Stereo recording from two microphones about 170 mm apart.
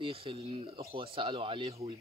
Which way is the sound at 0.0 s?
35° right (ahead or behind).